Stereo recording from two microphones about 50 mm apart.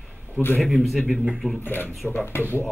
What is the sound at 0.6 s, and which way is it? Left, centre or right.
A man's voice, centre.